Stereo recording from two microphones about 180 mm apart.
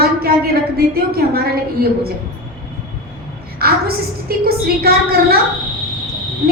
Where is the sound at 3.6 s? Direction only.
60° right (ahead or behind).